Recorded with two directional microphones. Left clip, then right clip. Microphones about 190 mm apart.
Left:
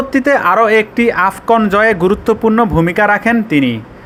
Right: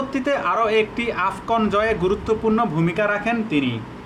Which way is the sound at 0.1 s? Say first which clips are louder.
Left 11 dB; 40° left (ahead or behind).